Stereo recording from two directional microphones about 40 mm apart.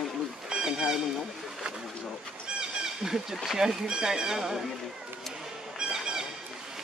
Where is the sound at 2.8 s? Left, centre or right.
Centre.